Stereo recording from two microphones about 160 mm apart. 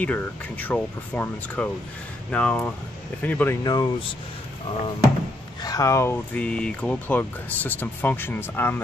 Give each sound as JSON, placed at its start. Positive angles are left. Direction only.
{"t": 0.0, "sound": "speech", "side_deg": 10}
{"t": 3.6, "sound": "speech", "side_deg": 25}
{"t": 5.6, "sound": "speech", "side_deg": 20}